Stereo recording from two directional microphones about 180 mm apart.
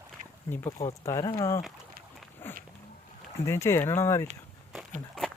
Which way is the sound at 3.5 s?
15° left (ahead or behind).